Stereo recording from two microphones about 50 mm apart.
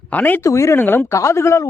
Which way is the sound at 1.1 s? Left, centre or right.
Left.